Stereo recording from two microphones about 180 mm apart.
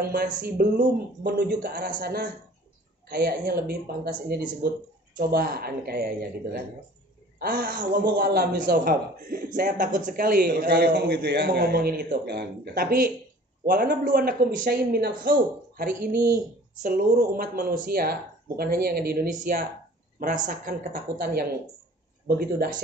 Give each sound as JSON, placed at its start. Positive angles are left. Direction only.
{"t": 0.0, "sound": "a man's voice", "side_deg": -60}
{"t": 16.8, "sound": "a man's voice", "side_deg": -45}